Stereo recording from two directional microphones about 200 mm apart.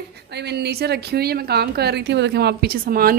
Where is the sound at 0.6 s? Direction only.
55° right (ahead or behind).